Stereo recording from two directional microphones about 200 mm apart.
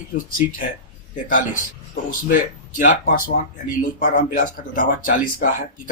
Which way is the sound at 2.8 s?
40° left (ahead or behind).